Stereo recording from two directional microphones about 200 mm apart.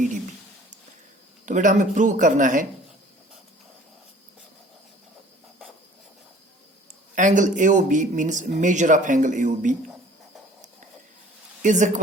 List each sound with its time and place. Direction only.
1.5 s speech: 40° right (ahead or behind)
7.2 s speech: 40° right (ahead or behind)
11.6 s speech: 40° right (ahead or behind)